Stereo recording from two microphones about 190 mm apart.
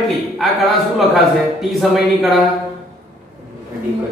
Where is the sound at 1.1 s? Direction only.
Centre (ahead or behind).